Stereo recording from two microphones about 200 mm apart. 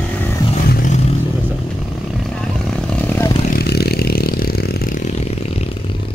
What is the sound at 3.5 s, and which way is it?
Vehicle, 50° left (ahead or behind).